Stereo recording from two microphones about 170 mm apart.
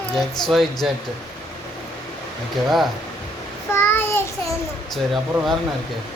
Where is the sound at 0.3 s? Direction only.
Centre (ahead or behind).